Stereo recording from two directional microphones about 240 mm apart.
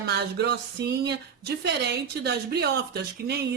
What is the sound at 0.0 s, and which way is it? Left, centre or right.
Speech, right.